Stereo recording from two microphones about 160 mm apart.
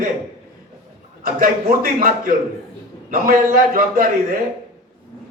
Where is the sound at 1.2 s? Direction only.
65° right (ahead or behind).